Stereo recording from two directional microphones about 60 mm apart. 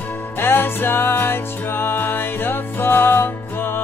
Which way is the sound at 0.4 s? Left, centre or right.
Left.